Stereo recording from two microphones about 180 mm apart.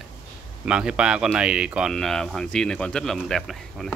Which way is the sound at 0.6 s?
5° right (ahead or behind).